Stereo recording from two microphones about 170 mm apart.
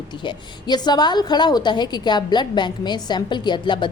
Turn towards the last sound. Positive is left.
turn(degrees=30)  # may be behind; listen again after turning